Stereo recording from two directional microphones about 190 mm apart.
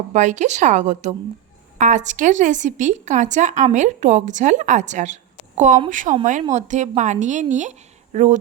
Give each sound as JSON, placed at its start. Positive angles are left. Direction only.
{"t": 0.1, "sound": "speech", "side_deg": -40}